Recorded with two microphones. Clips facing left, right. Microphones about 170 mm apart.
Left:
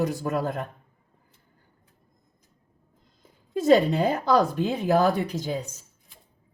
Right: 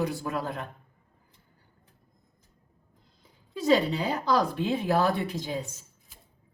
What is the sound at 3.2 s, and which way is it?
Speech, 45° left (ahead or behind).